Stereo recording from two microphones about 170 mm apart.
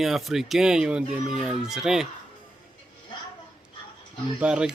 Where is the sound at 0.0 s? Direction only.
Centre (ahead or behind).